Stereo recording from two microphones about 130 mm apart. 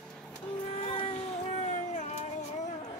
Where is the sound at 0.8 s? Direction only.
45° left (ahead or behind).